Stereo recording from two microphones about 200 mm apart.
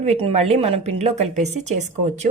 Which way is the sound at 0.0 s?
30° right (ahead or behind).